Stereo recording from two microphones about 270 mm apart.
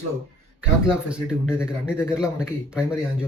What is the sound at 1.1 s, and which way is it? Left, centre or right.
Speech, centre.